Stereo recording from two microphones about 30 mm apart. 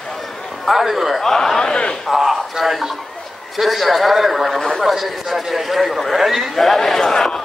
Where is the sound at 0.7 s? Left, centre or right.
Centre.